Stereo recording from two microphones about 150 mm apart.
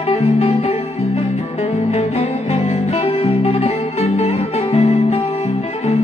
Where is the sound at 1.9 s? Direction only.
45° left (ahead or behind).